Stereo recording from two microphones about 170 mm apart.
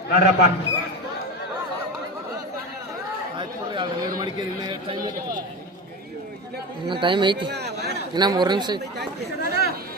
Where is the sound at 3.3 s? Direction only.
25° right (ahead or behind).